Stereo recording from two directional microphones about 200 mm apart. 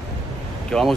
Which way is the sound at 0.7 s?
Centre (ahead or behind).